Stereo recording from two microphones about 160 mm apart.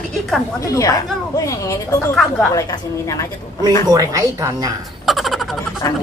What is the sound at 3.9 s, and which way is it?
Speech, 20° right (ahead or behind).